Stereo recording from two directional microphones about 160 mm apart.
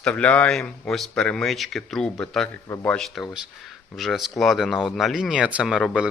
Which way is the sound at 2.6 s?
20° left (ahead or behind).